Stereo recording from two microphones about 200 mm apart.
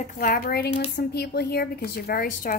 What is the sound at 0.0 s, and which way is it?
A woman's voice, 45° left (ahead or behind).